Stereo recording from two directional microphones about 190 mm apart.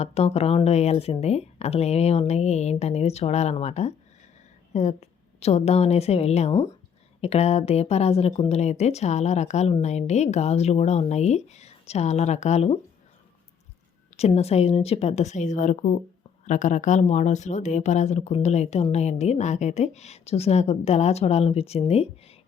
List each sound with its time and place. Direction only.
0.0 s a woman's voice: 35° left (ahead or behind)
14.2 s speech: 35° left (ahead or behind)